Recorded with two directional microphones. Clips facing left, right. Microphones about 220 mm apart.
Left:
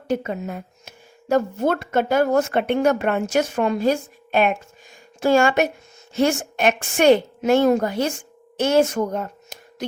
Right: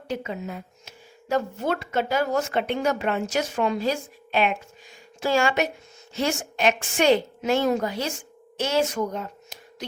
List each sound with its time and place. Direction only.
0.1 s speech: 50° left (ahead or behind)